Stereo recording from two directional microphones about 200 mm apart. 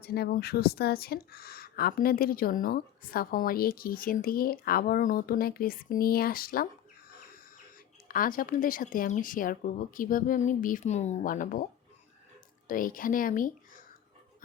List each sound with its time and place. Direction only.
0.0 s speech: 50° left (ahead or behind)
8.0 s speech: 45° left (ahead or behind)
12.6 s speech: 45° left (ahead or behind)